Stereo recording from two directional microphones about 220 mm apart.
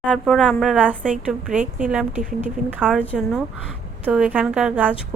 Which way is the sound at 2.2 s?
35° right (ahead or behind).